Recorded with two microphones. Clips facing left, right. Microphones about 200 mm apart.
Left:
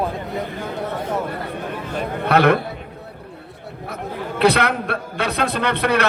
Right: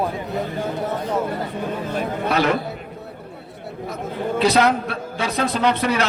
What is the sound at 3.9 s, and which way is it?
A man's voice, 60° left (ahead or behind).